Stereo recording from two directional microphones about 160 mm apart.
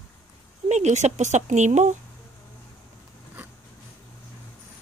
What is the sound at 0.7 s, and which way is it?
Speech, 45° right (ahead or behind).